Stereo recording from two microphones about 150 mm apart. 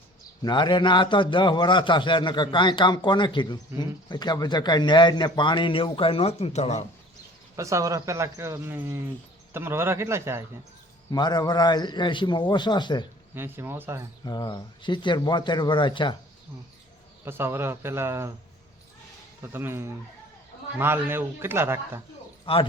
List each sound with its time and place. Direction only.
0.4 s a man's voice: 30° left (ahead or behind); by 6.8 s 50° left (ahead or behind)
7.5 s a man's voice: 20° right (ahead or behind)
11.1 s a man's voice: 25° left (ahead or behind)
13.3 s a man's voice: 15° right (ahead or behind)
14.3 s a man's voice: 25° left (ahead or behind)
17.2 s a man's voice: 15° right (ahead or behind)
19.4 s a man's voice: 15° right (ahead or behind)
22.5 s a man's voice: 35° left (ahead or behind)